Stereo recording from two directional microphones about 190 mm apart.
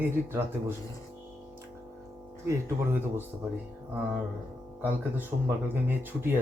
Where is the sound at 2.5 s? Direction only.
10° right (ahead or behind).